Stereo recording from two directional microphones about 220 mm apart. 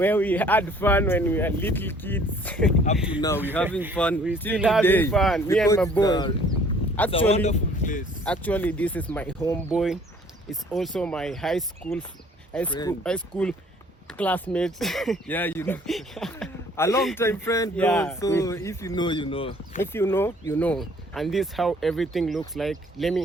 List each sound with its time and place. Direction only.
0.0 s speech: 10° left (ahead or behind)
4.8 s speech: 10° left (ahead or behind)
5.5 s speech: 10° left (ahead or behind); by 8.0 s 35° left (ahead or behind)
8.2 s speech: 5° left (ahead or behind)
9.7 s speech: centre (ahead or behind)
12.6 s speech: 20° left (ahead or behind)
13.0 s speech: 5° left (ahead or behind)
16.7 s speech: 10° left (ahead or behind)
19.8 s speech: 10° left (ahead or behind)